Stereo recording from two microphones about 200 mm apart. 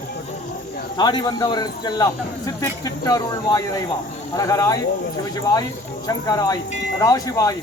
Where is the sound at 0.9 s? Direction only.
20° left (ahead or behind).